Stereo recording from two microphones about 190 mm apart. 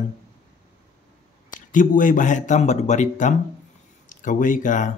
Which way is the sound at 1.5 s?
45° left (ahead or behind).